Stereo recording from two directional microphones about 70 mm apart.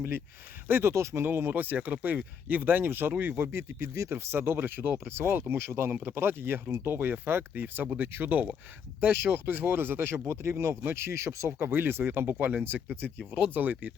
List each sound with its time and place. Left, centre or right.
0.7 s speech: right
11.6 s speech: right
13.1 s speech: centre
13.5 s speech: right